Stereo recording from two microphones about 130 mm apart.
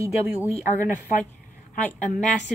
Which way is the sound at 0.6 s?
20° right (ahead or behind).